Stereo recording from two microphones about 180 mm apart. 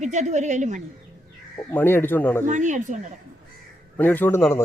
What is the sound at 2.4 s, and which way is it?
Speech, 40° right (ahead or behind).